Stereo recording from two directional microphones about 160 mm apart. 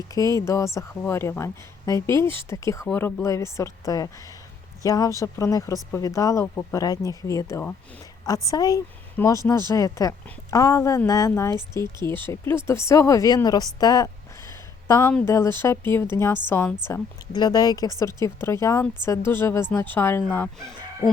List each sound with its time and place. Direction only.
0.1 s a woman's voice: 20° left (ahead or behind)
16.9 s speech: 25° left (ahead or behind); by 20.7 s 10° left (ahead or behind)